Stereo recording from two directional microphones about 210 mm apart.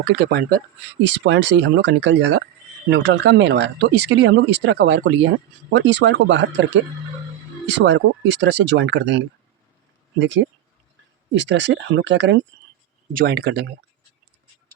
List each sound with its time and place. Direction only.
0.2 s speech: 50° right (ahead or behind)
13.1 s speech: 50° right (ahead or behind)